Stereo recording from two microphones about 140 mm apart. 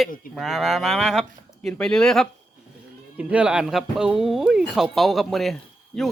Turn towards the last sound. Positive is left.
turn(degrees=0)  # may be behind; listen again after turning